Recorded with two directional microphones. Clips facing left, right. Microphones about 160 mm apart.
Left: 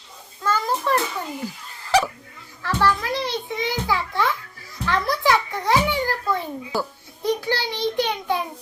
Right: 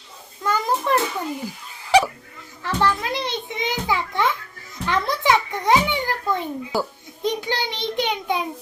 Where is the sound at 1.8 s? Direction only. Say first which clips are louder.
Right 3 dB; 15° right (ahead or behind).